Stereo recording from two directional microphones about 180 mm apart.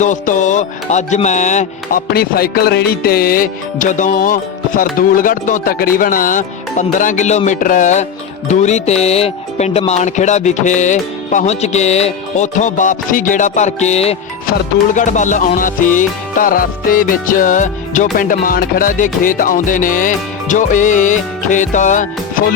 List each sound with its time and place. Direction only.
0.0 s music: 45° left (ahead or behind)
2.1 s music: 60° left (ahead or behind)